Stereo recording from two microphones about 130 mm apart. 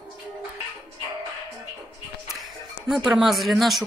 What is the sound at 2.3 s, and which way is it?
Speech, centre (ahead or behind).